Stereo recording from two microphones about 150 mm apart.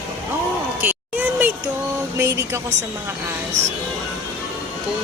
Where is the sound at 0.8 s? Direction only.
10° right (ahead or behind).